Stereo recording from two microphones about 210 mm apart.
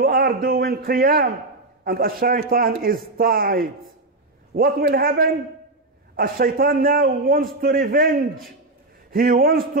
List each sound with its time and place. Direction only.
0.0 s a man's voice: 45° right (ahead or behind)